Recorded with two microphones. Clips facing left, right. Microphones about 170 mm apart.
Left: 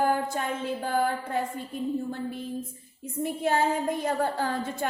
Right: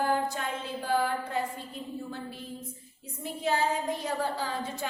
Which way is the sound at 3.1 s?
55° left (ahead or behind).